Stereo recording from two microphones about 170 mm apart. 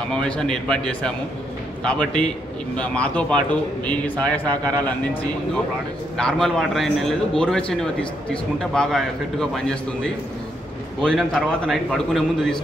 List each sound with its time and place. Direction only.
0.0 s a man's voice: 5° left (ahead or behind)